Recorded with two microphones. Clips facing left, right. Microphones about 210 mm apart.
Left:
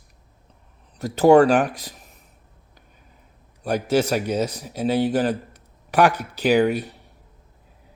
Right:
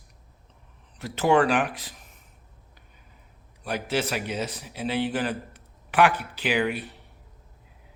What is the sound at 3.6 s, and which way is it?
A man's voice, 40° left (ahead or behind).